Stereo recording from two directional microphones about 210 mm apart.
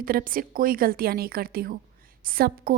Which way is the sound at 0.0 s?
45° right (ahead or behind).